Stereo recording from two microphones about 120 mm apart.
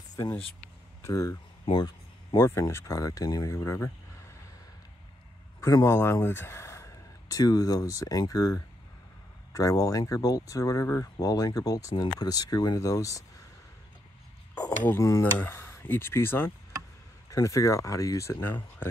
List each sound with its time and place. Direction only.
0.1 s a sound: 30° left (ahead or behind)
1.0 s speech: 25° left (ahead or behind)
5.6 s speech: 25° left (ahead or behind)
14.9 s speech: 25° left (ahead or behind)